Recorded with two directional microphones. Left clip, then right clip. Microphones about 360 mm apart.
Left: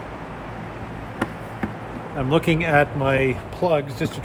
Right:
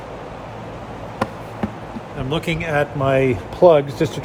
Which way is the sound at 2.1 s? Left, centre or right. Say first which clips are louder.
Left 3 dB; centre.